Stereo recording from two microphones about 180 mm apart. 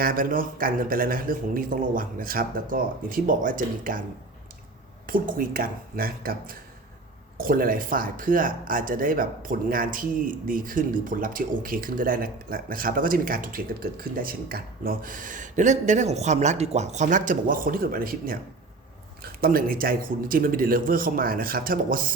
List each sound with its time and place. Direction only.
0.0 s speech: 50° right (ahead or behind)
5.0 s speech: 50° right (ahead or behind)